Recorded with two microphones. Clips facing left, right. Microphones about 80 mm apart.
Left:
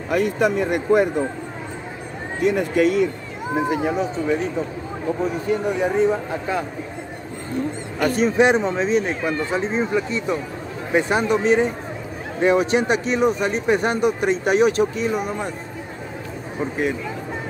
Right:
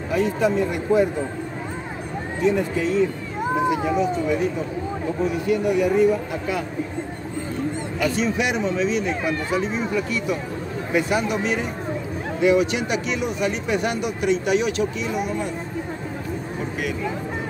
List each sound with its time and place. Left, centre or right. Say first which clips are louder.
0.1 s speech: left 1 dB; left
2.4 s speech: left 3 dB; left
3.5 s speech: left 1 dB; left
5.5 s speech: right 2 dB; left
8.0 s speech: left 6 dB; left